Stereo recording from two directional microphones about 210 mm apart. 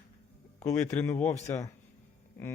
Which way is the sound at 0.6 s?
15° left (ahead or behind).